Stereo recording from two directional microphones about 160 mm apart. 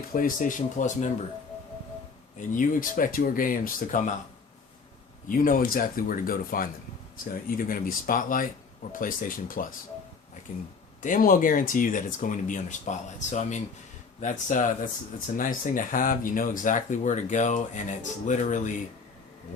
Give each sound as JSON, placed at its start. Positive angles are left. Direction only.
{"t": 0.1, "sound": "speech", "side_deg": 60}
{"t": 2.4, "sound": "speech", "side_deg": 55}
{"t": 5.3, "sound": "speech", "side_deg": 60}